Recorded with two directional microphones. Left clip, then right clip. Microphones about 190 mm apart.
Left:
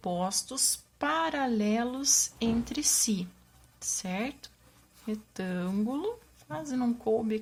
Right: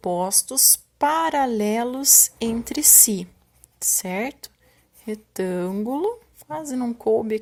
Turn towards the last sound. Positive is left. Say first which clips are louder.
# right 8 dB
turn(degrees=-35)  # may be behind; listen again after turning